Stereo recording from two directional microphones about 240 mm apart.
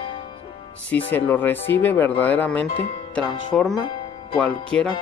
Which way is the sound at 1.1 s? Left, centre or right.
Centre.